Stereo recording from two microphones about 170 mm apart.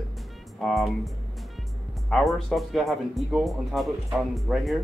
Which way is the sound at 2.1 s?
5° left (ahead or behind).